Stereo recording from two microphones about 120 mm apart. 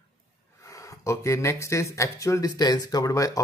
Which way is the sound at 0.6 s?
25° left (ahead or behind).